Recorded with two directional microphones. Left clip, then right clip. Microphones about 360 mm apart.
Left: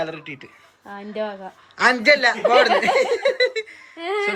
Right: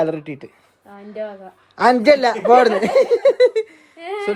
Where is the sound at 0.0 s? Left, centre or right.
Centre.